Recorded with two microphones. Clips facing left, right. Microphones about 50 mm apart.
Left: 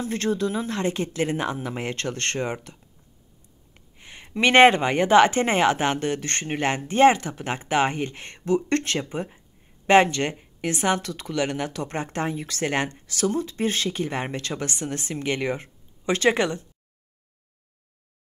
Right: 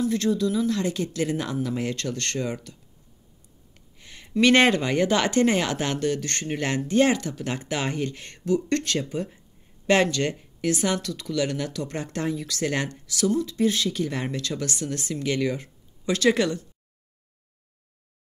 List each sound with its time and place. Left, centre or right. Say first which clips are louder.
0.0 s speech: right 2 dB; left